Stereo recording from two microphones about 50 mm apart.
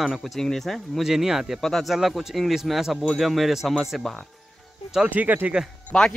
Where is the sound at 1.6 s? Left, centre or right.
Centre.